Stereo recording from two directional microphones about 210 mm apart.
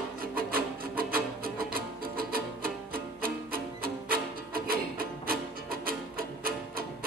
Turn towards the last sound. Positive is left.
turn(degrees=-45)  # may be behind; listen again after turning